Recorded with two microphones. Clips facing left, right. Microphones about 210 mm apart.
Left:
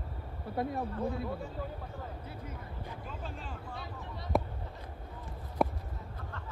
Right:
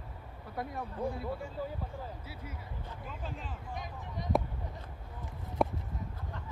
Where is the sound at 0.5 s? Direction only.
25° left (ahead or behind).